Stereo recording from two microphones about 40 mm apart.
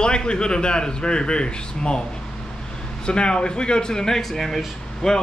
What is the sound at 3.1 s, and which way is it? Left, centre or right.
A man's voice, left.